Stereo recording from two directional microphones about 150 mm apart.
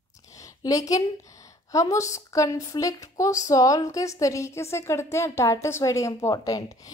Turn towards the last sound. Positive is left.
turn(degrees=25)  # may be behind; listen again after turning